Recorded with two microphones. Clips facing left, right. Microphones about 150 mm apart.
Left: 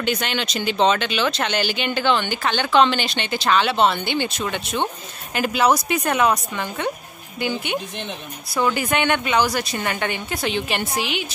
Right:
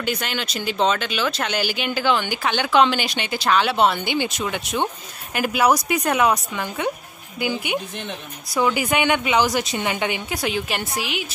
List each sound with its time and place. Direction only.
0.0 s speech: 5° right (ahead or behind)